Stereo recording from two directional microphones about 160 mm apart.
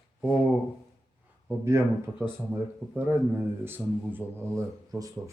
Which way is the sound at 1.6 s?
15° right (ahead or behind).